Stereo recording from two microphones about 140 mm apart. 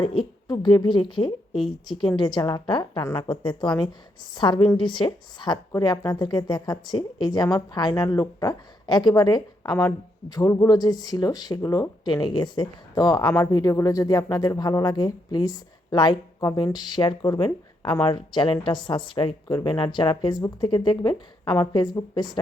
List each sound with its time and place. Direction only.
0.0 s a woman's voice: 40° left (ahead or behind)